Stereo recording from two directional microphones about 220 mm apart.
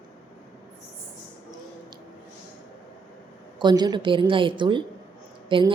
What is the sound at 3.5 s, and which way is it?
A woman's voice, 20° right (ahead or behind).